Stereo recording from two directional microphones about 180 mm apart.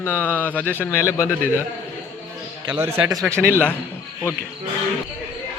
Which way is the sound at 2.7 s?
15° right (ahead or behind).